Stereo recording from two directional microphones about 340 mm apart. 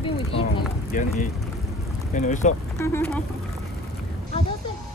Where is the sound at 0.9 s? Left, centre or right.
Left.